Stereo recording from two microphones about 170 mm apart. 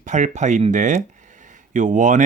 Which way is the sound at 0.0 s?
45° right (ahead or behind).